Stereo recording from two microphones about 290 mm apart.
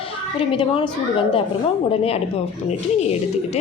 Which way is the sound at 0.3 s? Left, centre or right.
Centre.